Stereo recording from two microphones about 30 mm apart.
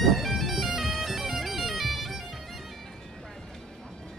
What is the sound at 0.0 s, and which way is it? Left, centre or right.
Bagpipes, centre.